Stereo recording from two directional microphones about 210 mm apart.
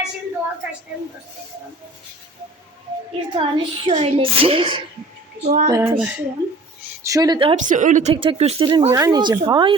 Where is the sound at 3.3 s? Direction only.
25° right (ahead or behind).